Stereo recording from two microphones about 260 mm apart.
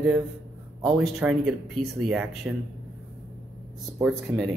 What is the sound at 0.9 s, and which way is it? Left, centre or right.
Speech, centre.